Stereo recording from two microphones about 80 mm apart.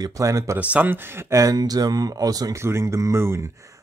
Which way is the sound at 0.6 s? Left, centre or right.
Centre.